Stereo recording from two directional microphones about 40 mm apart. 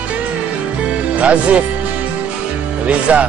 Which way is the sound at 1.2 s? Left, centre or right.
Right.